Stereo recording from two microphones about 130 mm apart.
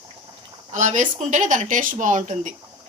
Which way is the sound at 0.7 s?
70° right (ahead or behind).